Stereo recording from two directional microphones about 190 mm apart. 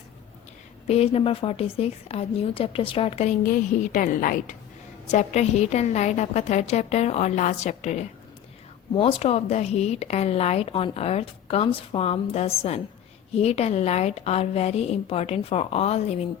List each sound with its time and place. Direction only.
0.9 s speech: 30° left (ahead or behind)
3.4 s a woman's voice: 45° left (ahead or behind)